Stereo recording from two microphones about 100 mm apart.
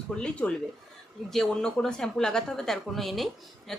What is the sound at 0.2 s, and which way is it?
A woman's voice, 15° left (ahead or behind).